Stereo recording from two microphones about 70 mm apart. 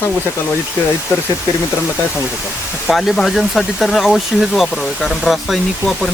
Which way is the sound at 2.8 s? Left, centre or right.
Centre.